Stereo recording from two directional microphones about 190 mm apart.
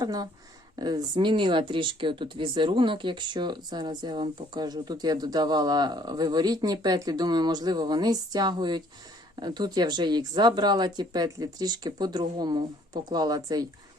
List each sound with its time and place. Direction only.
0.0 s speech: 20° right (ahead or behind)